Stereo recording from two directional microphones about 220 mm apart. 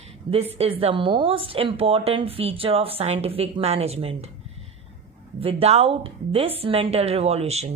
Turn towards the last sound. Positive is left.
turn(degrees=-30)  # may be behind; listen again after turning